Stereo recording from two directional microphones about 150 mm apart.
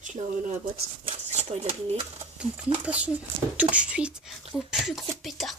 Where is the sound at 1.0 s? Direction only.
45° right (ahead or behind).